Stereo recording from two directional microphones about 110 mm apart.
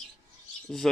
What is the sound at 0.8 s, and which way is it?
Speech, 5° left (ahead or behind).